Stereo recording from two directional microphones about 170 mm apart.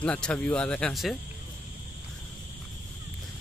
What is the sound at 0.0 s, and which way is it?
Speech, 5° left (ahead or behind).